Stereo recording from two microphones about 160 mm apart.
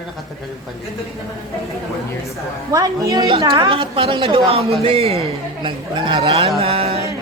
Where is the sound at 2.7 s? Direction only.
20° right (ahead or behind).